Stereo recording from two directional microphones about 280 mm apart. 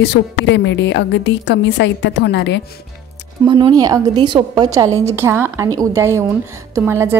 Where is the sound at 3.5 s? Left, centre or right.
Centre.